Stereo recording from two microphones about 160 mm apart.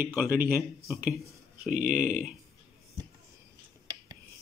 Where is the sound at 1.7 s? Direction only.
55° right (ahead or behind).